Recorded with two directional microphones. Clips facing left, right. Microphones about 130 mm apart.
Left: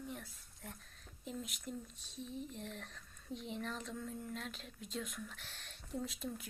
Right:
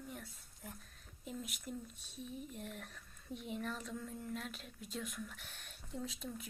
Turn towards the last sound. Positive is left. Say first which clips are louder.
# left 2 dB
turn(degrees=0)  # may be behind; listen again after turning